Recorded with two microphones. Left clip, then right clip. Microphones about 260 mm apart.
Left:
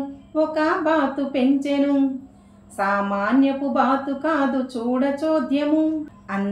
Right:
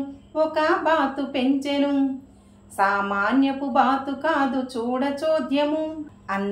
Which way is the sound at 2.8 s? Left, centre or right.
Centre.